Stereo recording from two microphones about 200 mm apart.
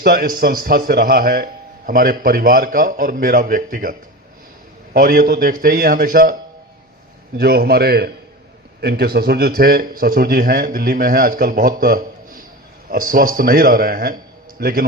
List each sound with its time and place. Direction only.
0.0 s a man's voice: 45° right (ahead or behind)
4.9 s a man's voice: 45° right (ahead or behind)
7.3 s a man's voice: 50° right (ahead or behind)